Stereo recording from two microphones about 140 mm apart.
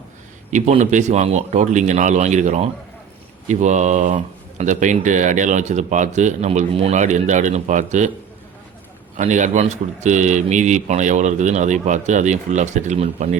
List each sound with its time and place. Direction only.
0.5 s speech: 55° right (ahead or behind)
9.1 s speech: 60° right (ahead or behind)